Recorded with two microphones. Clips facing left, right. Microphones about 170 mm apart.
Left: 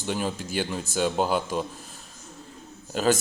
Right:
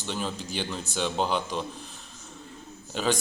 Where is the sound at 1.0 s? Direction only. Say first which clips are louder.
Left 3 dB; 5° left (ahead or behind).